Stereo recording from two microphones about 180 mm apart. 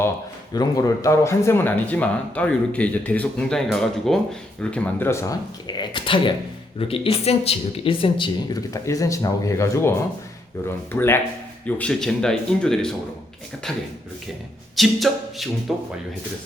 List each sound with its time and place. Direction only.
0.5 s speech: 20° left (ahead or behind); by 12.9 s 5° left (ahead or behind)
14.8 s speech: centre (ahead or behind)